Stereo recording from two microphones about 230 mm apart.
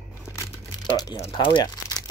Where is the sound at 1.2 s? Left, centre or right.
Left.